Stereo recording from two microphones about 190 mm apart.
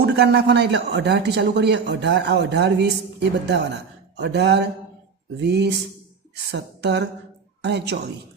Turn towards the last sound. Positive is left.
turn(degrees=-60)  # may be behind; listen again after turning